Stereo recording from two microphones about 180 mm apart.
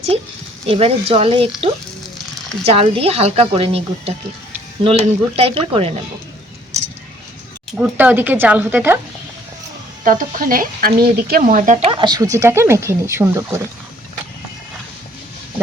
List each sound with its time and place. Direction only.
0.1 s speech: 35° right (ahead or behind)
2.6 s speech: 30° right (ahead or behind)
7.8 s speech: 10° right (ahead or behind)
10.0 s speech: 45° right (ahead or behind); by 13.6 s 15° right (ahead or behind)